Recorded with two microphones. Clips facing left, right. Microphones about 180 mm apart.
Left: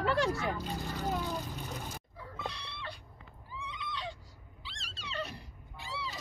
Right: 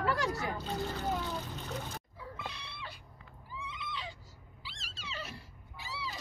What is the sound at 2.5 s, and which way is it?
Cat, 5° right (ahead or behind).